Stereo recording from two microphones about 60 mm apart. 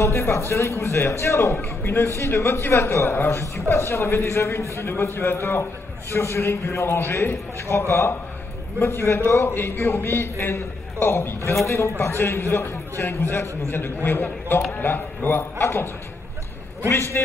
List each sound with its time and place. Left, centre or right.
0.0 s a man's voice: left